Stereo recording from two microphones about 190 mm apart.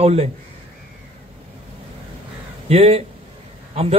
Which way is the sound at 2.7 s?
35° right (ahead or behind).